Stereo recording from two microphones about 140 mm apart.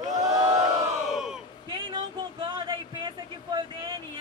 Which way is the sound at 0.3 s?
25° right (ahead or behind).